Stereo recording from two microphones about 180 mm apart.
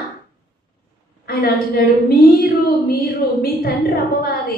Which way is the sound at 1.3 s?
60° left (ahead or behind).